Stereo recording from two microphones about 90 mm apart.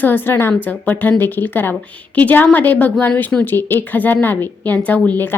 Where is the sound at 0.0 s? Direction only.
25° left (ahead or behind).